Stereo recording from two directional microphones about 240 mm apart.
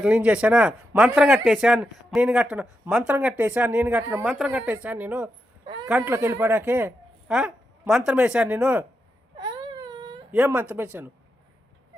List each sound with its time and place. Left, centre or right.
0.0 s speech: centre
5.6 s a sound: centre
5.9 s speech: centre
9.4 s whimper: centre
10.3 s speech: centre